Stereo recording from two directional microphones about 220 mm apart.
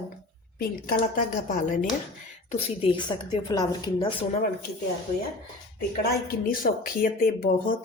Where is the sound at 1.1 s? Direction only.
35° left (ahead or behind); by 4.1 s 20° left (ahead or behind).